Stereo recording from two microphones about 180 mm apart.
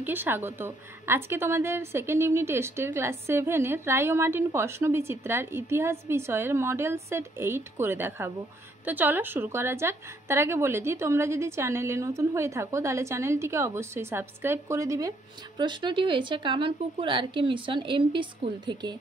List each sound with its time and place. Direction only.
0.0 s a woman's voice: 10° right (ahead or behind)